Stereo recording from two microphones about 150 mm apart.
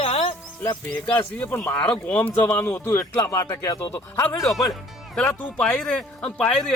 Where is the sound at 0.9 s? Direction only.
10° left (ahead or behind).